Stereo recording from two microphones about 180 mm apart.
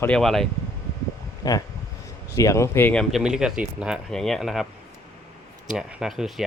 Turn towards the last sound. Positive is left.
turn(degrees=0)  # may be behind; listen again after turning